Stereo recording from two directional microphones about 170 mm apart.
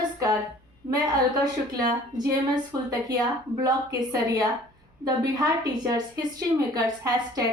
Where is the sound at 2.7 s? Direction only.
20° right (ahead or behind).